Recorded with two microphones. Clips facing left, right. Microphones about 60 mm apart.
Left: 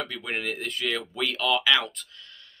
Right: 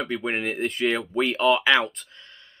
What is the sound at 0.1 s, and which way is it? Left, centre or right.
Speech, right.